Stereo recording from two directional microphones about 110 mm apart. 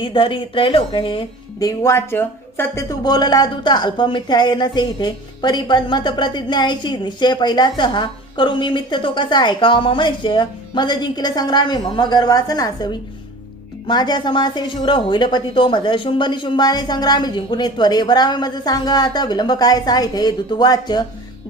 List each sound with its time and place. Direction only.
0.0 s a woman's voice: 50° left (ahead or behind)
1.5 s speech: 30° left (ahead or behind)
2.9 s a woman's voice: 40° left (ahead or behind)